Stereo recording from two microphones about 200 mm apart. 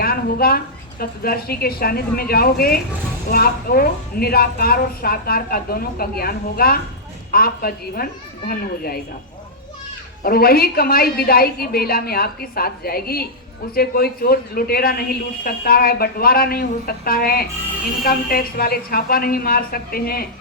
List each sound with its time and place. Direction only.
0.0 s a woman's voice: 50° left (ahead or behind)
10.2 s a woman's voice: 50° left (ahead or behind)